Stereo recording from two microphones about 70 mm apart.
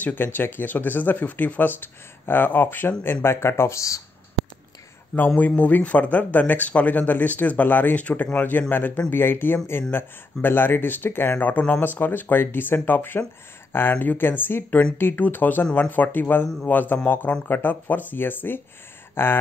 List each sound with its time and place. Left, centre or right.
0.0 s speech: left
5.4 s speech: left